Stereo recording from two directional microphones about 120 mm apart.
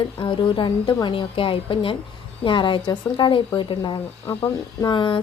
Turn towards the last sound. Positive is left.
turn(degrees=40)  # may be behind; listen again after turning